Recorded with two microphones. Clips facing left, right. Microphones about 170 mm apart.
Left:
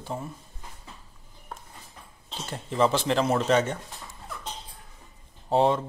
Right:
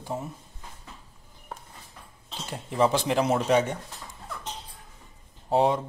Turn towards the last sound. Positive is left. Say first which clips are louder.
# left 1 dB
turn(degrees=-5)  # may be behind; listen again after turning